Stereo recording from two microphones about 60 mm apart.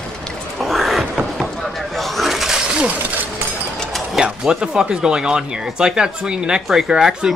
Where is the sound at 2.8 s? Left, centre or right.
Right.